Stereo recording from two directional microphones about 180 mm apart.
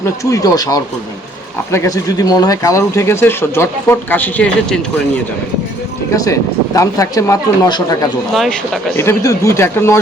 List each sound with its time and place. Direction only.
0.0 s speech: 20° left (ahead or behind)
6.1 s speech: 20° left (ahead or behind)
8.3 s speech: centre (ahead or behind)
9.0 s speech: 15° left (ahead or behind)